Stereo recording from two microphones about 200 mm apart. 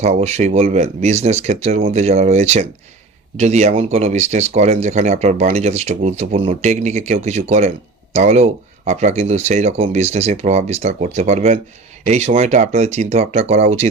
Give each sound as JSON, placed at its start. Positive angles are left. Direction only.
{"t": 0.0, "sound": "speech", "side_deg": -35}